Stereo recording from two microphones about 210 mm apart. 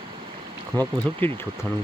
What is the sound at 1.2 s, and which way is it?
Speech, 10° left (ahead or behind).